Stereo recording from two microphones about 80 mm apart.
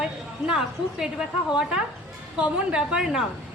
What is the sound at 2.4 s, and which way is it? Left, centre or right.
Speech, centre.